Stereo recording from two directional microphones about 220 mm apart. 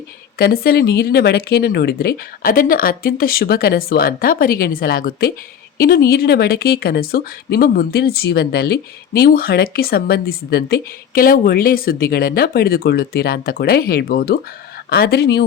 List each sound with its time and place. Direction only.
0.3 s speech: 45° left (ahead or behind)